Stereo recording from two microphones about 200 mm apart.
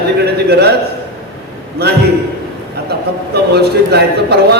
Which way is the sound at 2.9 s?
50° right (ahead or behind).